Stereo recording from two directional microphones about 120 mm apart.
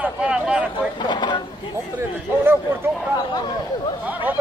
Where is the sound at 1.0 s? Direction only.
40° left (ahead or behind).